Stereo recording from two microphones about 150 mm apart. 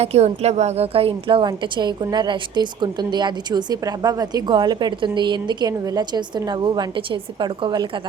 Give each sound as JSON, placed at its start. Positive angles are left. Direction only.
{"t": 0.0, "sound": "a woman's voice", "side_deg": -45}